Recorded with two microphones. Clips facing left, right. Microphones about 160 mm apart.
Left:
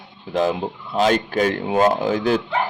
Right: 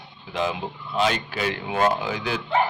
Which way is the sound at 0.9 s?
45° left (ahead or behind).